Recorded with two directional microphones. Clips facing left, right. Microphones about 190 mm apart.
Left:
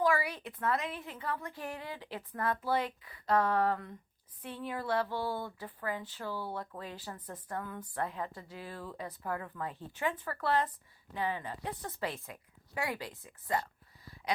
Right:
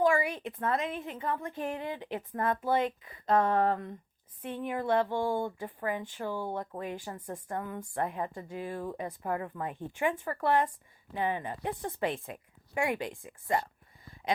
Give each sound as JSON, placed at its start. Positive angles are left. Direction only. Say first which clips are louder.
{"t": 0.0, "sound": "a woman's voice", "louder": "right 4 dB", "side_deg": -20}